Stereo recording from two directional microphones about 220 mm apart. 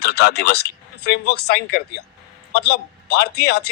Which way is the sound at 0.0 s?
50° left (ahead or behind).